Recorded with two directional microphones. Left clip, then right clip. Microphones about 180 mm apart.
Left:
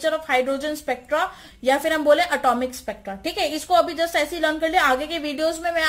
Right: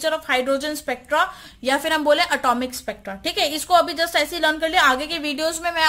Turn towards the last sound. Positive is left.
turn(degrees=-35)  # may be behind; listen again after turning